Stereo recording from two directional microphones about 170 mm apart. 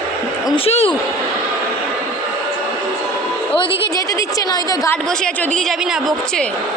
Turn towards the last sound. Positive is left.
turn(degrees=15)  # may be behind; listen again after turning